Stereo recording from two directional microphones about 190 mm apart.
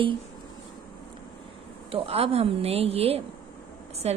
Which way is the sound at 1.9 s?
30° right (ahead or behind).